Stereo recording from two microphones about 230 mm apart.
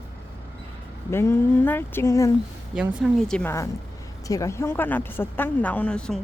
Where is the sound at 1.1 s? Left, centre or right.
Centre.